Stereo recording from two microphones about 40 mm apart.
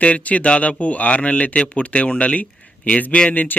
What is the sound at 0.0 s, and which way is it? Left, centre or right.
Speech, left.